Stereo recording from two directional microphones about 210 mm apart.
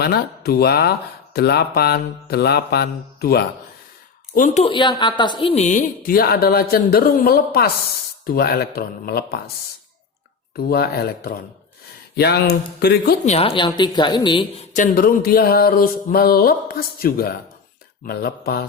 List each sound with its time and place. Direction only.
0.0 s speech: 50° left (ahead or behind)
4.4 s speech: 35° left (ahead or behind)
10.6 s speech: 45° left (ahead or behind)
13.2 s a woman's voice: 30° left (ahead or behind)
14.7 s speech: 40° left (ahead or behind)